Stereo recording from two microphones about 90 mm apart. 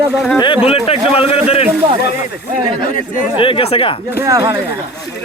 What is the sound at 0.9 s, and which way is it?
Speech, 90° left.